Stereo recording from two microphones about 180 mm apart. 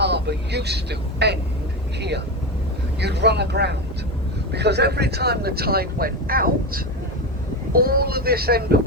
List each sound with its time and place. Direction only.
0.0 s speech: 70° right (ahead or behind)